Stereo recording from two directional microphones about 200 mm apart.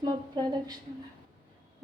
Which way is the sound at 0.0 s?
20° right (ahead or behind).